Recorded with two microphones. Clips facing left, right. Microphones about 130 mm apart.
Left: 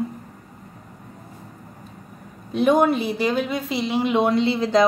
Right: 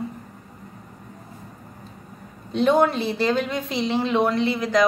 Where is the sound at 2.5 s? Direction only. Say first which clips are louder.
Left 1 dB; 10° left (ahead or behind).